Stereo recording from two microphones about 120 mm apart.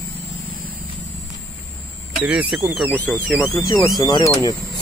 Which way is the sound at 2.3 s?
10° right (ahead or behind).